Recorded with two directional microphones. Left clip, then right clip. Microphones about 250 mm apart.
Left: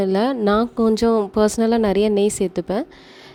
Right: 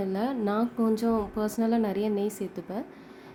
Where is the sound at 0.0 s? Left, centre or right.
Left.